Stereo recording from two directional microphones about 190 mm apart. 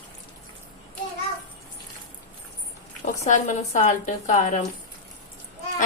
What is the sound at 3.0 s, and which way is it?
Speech, 40° left (ahead or behind).